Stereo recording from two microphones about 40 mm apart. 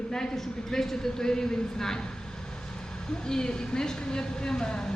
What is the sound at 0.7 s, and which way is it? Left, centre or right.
Speech, centre.